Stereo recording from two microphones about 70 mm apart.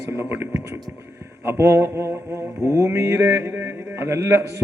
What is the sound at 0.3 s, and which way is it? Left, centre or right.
A man's voice, right.